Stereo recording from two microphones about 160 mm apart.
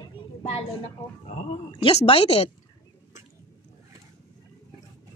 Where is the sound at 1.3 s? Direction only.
40° left (ahead or behind).